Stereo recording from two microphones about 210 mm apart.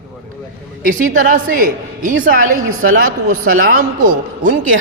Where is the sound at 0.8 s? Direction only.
40° right (ahead or behind).